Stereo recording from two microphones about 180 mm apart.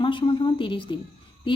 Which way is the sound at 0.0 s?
30° left (ahead or behind).